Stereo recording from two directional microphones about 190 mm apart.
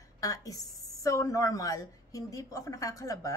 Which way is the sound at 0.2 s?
20° left (ahead or behind).